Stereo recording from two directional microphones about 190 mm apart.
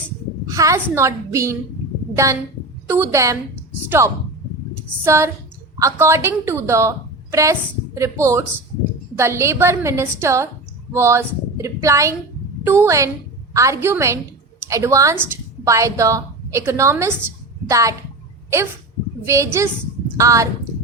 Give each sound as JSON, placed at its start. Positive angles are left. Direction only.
{"t": 0.4, "sound": "a woman's voice", "side_deg": -15}
{"t": 19.2, "sound": "a woman's voice", "side_deg": -15}